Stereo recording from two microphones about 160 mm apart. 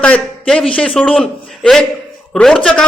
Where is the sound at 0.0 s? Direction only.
5° left (ahead or behind).